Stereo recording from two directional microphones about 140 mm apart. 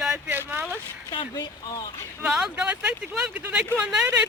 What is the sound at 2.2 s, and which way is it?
Speech, 5° right (ahead or behind).